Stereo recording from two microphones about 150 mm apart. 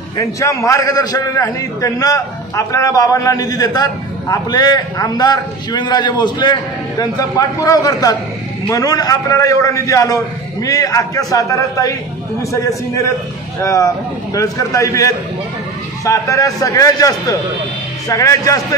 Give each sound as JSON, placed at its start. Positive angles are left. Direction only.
{"t": 0.2, "sound": "a man's voice", "side_deg": 20}